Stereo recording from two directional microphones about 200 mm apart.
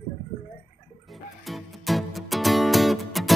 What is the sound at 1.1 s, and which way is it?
Music, centre (ahead or behind).